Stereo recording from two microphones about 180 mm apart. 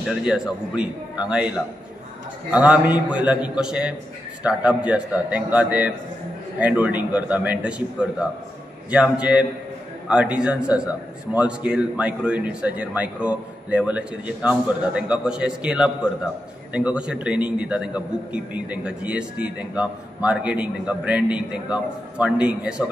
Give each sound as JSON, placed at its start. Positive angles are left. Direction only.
{"t": 0.2, "sound": "a man's voice", "side_deg": -5}